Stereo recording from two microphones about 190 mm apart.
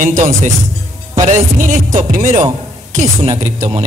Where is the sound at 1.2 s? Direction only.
45° right (ahead or behind).